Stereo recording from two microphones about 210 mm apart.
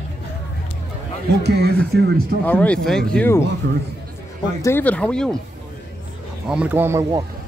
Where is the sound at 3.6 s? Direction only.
50° right (ahead or behind).